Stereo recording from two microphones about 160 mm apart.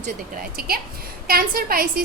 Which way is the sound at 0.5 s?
70° right (ahead or behind).